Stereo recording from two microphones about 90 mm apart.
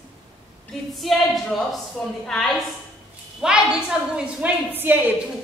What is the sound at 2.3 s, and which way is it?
Speech, 5° left (ahead or behind).